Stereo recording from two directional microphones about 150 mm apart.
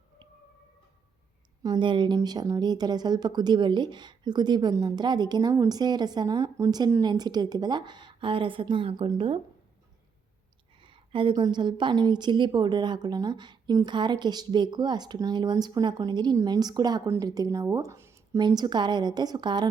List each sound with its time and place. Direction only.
1.6 s speech: 30° right (ahead or behind)
10.8 s speech: 35° right (ahead or behind)